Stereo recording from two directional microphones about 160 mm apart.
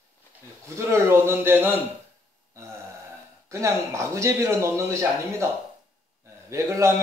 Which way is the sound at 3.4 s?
20° right (ahead or behind).